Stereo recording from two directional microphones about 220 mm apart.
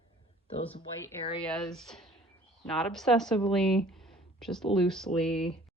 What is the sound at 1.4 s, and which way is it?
Speech, 5° left (ahead or behind).